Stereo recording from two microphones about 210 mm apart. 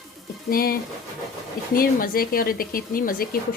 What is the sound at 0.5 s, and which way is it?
A woman's voice, 45° left (ahead or behind).